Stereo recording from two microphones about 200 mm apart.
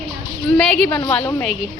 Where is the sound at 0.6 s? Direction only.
5° left (ahead or behind).